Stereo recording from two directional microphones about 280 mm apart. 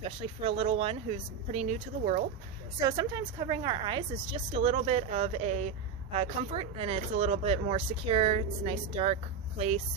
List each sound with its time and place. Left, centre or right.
0.0 s speech: centre
2.8 s speech: centre